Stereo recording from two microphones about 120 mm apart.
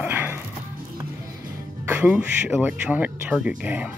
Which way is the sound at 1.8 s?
15° right (ahead or behind).